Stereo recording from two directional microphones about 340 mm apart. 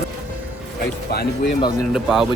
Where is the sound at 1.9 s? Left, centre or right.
Centre.